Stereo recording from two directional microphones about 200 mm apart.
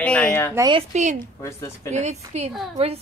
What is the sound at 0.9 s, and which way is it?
Speech, 35° right (ahead or behind).